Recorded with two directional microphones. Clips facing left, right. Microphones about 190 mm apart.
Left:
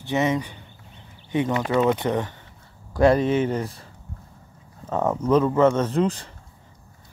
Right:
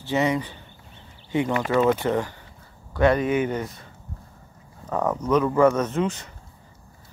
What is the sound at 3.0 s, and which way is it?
Speech, 30° left (ahead or behind).